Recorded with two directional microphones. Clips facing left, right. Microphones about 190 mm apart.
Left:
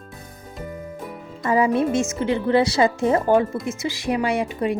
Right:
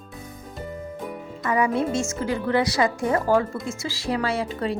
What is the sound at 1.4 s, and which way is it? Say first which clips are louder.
A woman's voice: left 4 dB; 25° left (ahead or behind).